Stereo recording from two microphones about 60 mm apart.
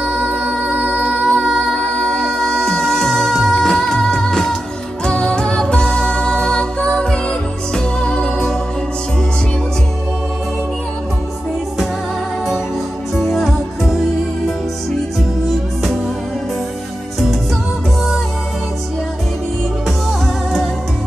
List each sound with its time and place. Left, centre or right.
0.0 s music: right
1.2 s music: centre
13.1 s music: centre